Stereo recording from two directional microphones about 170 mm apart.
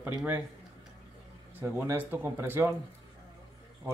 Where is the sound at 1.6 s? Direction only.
10° right (ahead or behind).